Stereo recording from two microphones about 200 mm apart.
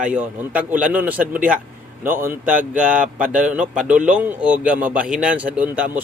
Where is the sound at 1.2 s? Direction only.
40° right (ahead or behind).